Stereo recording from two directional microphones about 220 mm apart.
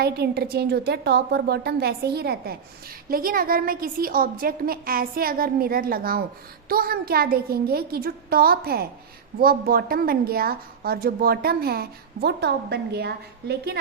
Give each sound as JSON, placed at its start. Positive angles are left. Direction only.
{"t": 0.0, "sound": "a woman's voice", "side_deg": -45}